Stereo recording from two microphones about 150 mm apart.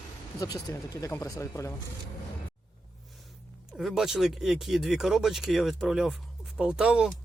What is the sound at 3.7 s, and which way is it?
Speech, centre (ahead or behind).